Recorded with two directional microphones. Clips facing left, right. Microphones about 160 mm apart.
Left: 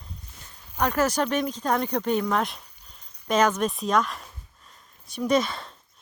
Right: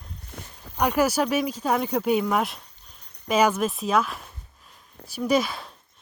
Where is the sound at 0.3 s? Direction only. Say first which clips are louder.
Right 10 dB; 60° right (ahead or behind).